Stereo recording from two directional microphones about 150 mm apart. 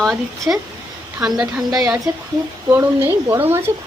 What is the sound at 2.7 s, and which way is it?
Speech, 15° right (ahead or behind).